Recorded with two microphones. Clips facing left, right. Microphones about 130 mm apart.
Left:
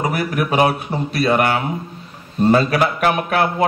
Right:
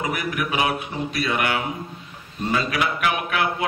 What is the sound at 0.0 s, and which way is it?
A man's voice, 35° left (ahead or behind).